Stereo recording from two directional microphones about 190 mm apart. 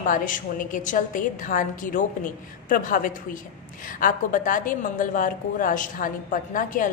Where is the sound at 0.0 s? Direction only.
45° left (ahead or behind).